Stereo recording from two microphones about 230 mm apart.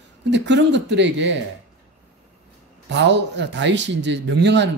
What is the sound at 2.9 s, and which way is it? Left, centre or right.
A man's voice, right.